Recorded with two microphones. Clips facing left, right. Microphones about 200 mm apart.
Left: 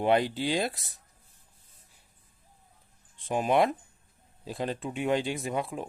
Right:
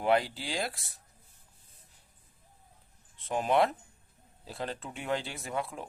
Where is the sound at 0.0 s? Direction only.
20° left (ahead or behind).